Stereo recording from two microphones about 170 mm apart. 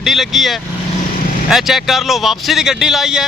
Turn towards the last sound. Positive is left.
turn(degrees=0)  # may be behind; listen again after turning